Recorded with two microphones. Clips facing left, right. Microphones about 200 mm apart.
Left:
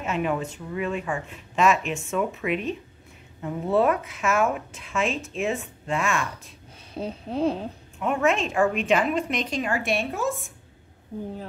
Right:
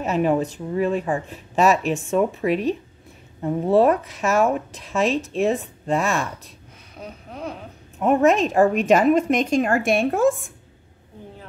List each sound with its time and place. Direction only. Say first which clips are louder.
0.0 s speech: right 6 dB; 40° right (ahead or behind)
6.9 s a sound: left 7 dB; 30° left (ahead or behind)
8.0 s a woman's voice: right 6 dB; 40° right (ahead or behind)